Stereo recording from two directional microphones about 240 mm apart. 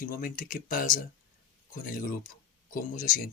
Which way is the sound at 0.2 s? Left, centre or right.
Left.